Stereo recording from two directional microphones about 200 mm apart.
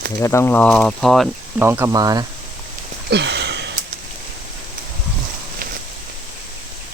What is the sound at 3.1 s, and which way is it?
Sniff, 60° right (ahead or behind).